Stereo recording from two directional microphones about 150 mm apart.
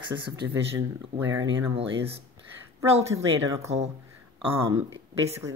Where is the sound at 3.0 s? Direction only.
20° right (ahead or behind).